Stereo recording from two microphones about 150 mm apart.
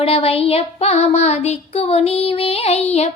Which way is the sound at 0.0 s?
40° left (ahead or behind).